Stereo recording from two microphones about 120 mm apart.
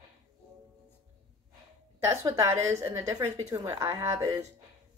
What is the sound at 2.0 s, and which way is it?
Speech, 25° right (ahead or behind).